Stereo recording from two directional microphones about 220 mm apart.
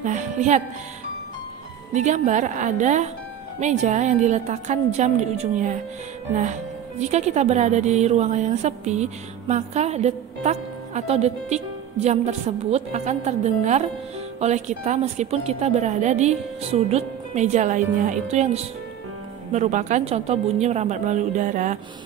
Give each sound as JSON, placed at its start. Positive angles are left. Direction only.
{"t": 0.0, "sound": "music", "side_deg": -35}
{"t": 2.0, "sound": "speech", "side_deg": -35}